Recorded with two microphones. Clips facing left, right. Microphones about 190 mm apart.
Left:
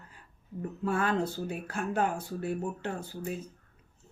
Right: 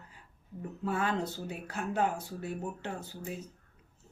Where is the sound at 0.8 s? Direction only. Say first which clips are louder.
Left 3 dB; 20° right (ahead or behind).